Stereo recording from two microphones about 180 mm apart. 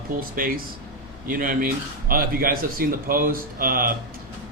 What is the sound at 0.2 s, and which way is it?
Speech, 50° right (ahead or behind).